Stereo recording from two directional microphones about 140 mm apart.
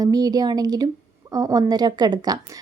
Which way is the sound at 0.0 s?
25° right (ahead or behind).